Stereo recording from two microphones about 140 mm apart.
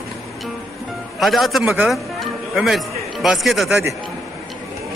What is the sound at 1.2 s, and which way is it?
A man's voice, centre (ahead or behind).